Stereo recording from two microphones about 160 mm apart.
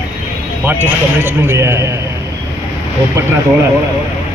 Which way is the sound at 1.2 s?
15° right (ahead or behind).